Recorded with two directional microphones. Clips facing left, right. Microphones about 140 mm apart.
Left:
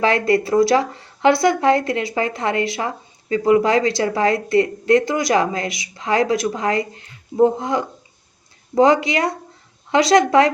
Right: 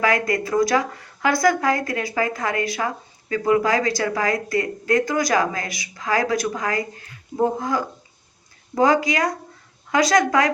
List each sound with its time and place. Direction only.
0.0 s speech: 30° left (ahead or behind)